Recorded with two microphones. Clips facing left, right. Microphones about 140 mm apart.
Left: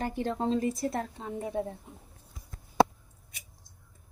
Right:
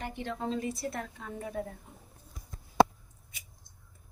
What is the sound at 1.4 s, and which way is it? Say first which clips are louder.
Speech: left 4 dB; 20° left (ahead or behind).